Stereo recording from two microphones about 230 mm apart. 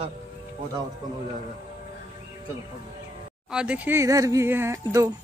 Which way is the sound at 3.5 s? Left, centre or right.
Centre.